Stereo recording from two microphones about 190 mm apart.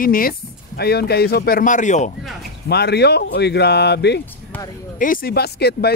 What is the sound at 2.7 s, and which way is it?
Speech, 60° left (ahead or behind).